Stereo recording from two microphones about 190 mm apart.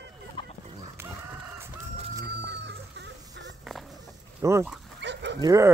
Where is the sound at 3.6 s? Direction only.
Centre (ahead or behind).